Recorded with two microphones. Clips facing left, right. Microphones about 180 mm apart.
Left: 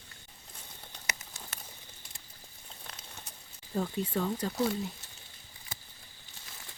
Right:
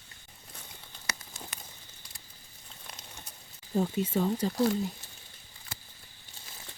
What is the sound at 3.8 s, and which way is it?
Speech, 5° right (ahead or behind).